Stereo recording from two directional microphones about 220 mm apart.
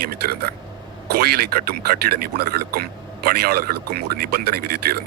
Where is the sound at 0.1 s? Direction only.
45° right (ahead or behind).